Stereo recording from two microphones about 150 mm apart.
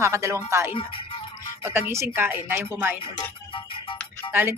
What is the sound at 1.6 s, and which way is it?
Speech, 15° right (ahead or behind).